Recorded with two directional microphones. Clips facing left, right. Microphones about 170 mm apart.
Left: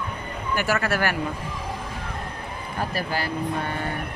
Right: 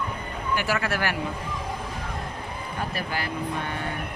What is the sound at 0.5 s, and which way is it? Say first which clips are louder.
Speech: left 2 dB; 45° left (ahead or behind).